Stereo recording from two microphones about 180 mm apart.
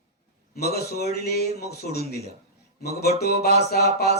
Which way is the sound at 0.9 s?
60° left (ahead or behind).